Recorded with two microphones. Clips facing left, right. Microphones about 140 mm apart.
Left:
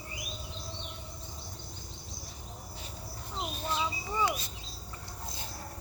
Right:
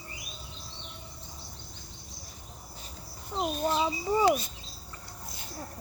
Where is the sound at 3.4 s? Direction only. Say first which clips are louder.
Right 7 dB; 30° right (ahead or behind).